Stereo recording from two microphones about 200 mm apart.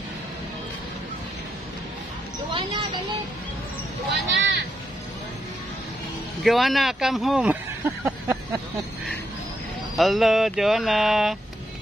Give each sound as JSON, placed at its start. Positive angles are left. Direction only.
{"t": 4.4, "sound": "music", "side_deg": -60}
{"t": 6.4, "sound": "speech", "side_deg": 0}
{"t": 9.9, "sound": "speech", "side_deg": 0}